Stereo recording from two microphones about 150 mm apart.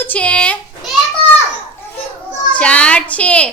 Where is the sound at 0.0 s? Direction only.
10° left (ahead or behind).